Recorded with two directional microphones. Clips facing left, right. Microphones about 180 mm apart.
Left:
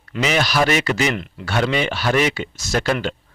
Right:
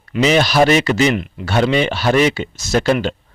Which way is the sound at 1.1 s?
15° right (ahead or behind).